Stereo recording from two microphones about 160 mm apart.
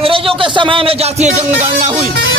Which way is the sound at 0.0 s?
35° right (ahead or behind).